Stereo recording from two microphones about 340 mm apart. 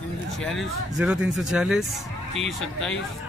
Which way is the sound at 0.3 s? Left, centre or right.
Centre.